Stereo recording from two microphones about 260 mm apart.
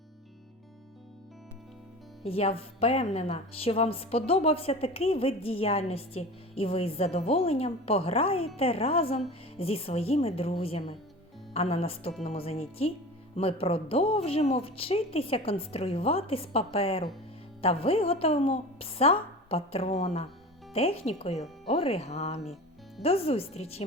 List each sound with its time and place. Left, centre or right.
2.2 s a woman's voice: left